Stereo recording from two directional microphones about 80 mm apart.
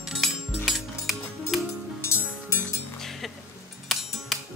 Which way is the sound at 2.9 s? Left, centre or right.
Centre.